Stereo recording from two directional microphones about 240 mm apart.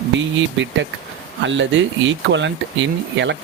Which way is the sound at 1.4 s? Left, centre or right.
Right.